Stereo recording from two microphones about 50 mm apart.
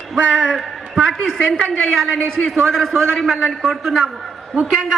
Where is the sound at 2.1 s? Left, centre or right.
Left.